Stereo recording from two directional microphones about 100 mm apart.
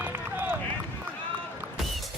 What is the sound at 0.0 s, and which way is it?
Run, 15° right (ahead or behind).